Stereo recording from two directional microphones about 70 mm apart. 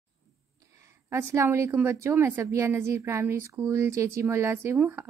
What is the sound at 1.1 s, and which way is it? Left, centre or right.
Speech, right.